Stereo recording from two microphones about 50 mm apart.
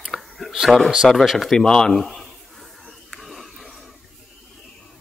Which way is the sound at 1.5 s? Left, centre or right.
Centre.